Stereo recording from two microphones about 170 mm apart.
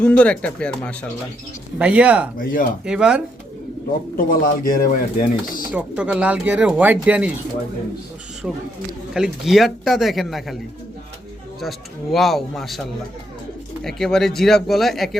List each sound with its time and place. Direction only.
0.0 s speech: 5° left (ahead or behind)
1.8 s speech: 10° right (ahead or behind)
2.4 s speech: 55° left (ahead or behind)
2.8 s a man's voice: 5° right (ahead or behind)
4.2 s speech: 60° left (ahead or behind)
5.7 s speech: 5° right (ahead or behind)
8.4 s a man's voice: 5° right (ahead or behind)
12.1 s a man's voice: centre (ahead or behind)
13.8 s a man's voice: centre (ahead or behind)